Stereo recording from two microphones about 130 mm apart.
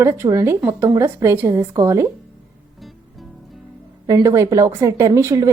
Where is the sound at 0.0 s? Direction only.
20° right (ahead or behind).